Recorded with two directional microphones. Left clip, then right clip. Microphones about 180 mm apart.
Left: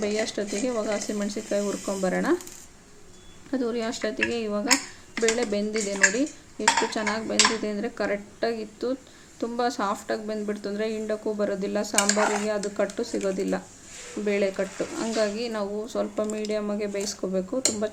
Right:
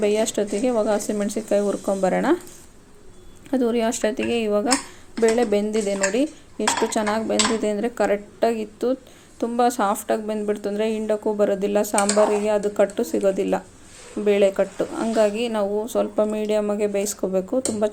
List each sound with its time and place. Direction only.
0.0 s speech: 20° right (ahead or behind)
3.5 s speech: 20° right (ahead or behind)